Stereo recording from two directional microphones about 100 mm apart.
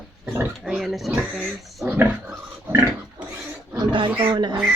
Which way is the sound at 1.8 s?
15° right (ahead or behind).